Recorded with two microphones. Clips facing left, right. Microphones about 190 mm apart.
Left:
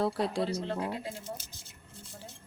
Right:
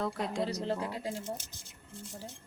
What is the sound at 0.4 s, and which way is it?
Speech, 35° right (ahead or behind).